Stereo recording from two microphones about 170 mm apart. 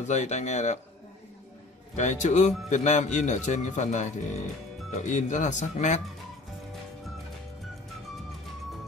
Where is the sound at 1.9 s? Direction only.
45° left (ahead or behind).